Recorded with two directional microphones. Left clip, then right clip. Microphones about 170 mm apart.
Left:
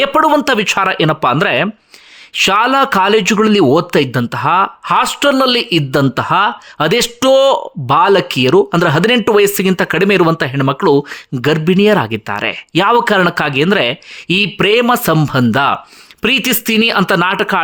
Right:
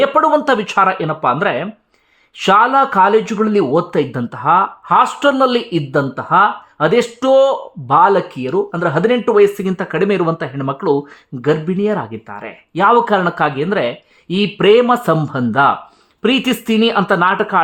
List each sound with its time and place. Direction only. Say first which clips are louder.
0.0 s speech: left 1 dB; 25° left (ahead or behind)
3.9 s speech: left 4 dB; 15° left (ahead or behind)